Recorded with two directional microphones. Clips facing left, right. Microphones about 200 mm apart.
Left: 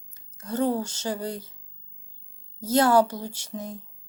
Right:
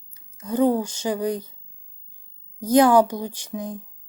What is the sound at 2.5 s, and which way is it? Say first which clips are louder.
Speech: right 4 dB; 15° right (ahead or behind).